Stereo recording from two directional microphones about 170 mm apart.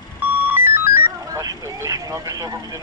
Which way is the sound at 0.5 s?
15° right (ahead or behind).